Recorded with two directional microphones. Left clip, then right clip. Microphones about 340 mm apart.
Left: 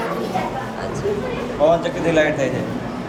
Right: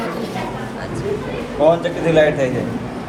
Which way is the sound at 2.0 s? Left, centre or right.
Centre.